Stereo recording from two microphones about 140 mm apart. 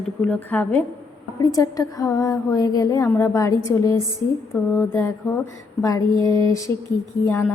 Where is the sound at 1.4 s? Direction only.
25° left (ahead or behind).